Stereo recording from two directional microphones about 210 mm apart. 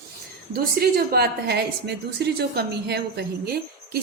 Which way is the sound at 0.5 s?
50° right (ahead or behind).